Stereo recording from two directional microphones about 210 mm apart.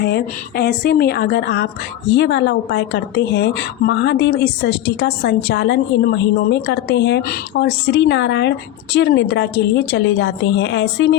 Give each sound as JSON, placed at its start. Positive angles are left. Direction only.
{"t": 0.0, "sound": "a woman's voice", "side_deg": 50}